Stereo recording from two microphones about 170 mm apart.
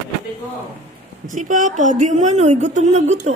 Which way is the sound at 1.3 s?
50° right (ahead or behind).